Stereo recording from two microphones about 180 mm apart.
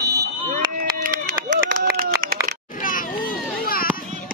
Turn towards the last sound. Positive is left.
turn(degrees=55)  # may be behind; listen again after turning